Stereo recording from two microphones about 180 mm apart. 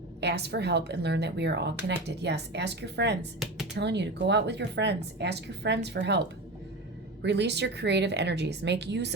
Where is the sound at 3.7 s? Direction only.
70° right (ahead or behind).